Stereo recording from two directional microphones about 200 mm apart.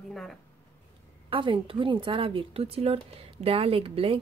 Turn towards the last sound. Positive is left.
turn(degrees=-30)  # may be behind; listen again after turning